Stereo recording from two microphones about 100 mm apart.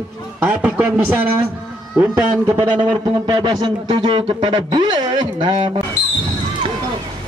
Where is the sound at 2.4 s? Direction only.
45° right (ahead or behind).